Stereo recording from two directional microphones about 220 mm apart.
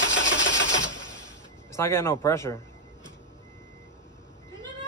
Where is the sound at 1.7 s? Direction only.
10° left (ahead or behind).